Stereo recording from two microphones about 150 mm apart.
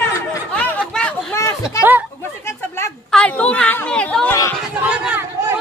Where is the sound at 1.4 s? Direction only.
20° left (ahead or behind).